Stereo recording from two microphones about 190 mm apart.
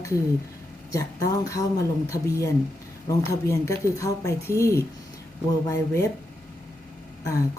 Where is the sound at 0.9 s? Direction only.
15° left (ahead or behind).